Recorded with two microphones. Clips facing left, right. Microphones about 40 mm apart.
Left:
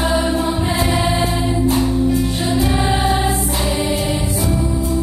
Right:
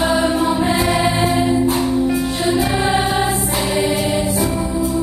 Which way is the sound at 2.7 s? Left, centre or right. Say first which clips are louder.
Even; right.